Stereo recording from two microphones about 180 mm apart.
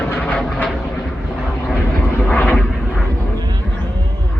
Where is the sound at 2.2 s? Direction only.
5° left (ahead or behind).